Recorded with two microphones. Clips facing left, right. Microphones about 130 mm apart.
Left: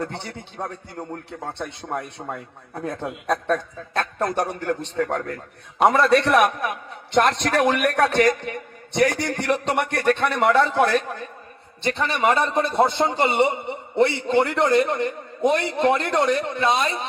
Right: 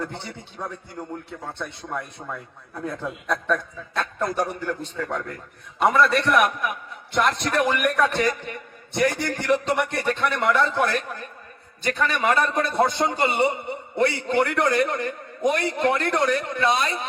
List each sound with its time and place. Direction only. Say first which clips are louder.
0.0 s a man's voice: left 2 dB; 65° left (ahead or behind)
1.0 s a man's voice: left 2 dB; 40° left (ahead or behind)
2.8 s a man's voice: left 2 dB; 70° left (ahead or behind)
11.8 s a man's voice: left 1 dB; 25° left (ahead or behind)